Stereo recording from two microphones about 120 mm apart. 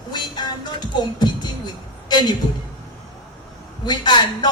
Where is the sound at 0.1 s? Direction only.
35° left (ahead or behind).